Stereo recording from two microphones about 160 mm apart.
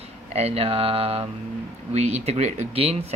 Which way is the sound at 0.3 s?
40° right (ahead or behind).